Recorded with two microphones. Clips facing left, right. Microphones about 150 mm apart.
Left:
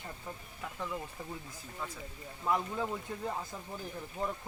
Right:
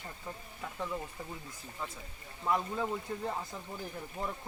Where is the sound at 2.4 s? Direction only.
5° left (ahead or behind).